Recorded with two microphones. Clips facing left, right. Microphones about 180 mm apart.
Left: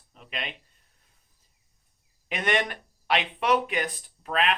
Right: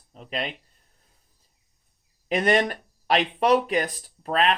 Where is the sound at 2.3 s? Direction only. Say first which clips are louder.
Right 6 dB; 35° right (ahead or behind).